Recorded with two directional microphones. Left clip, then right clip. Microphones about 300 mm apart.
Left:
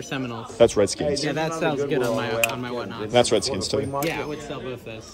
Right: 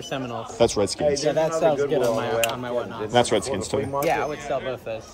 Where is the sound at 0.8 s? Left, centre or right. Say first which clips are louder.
Even; centre.